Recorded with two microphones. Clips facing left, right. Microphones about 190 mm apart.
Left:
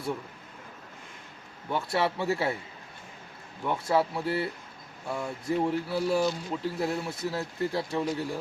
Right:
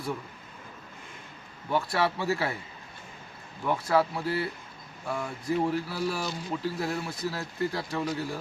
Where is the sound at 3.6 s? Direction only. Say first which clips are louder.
Right 1 dB; 25° left (ahead or behind).